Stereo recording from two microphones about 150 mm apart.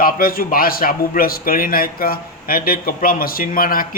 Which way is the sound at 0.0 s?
75° left (ahead or behind).